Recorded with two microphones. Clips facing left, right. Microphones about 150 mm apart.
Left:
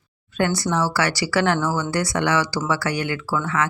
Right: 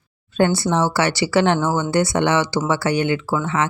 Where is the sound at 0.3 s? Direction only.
30° right (ahead or behind).